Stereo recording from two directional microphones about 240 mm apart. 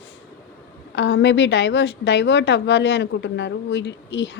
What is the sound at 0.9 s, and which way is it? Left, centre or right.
A woman's voice, left.